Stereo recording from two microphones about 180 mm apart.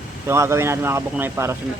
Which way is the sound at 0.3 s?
15° right (ahead or behind).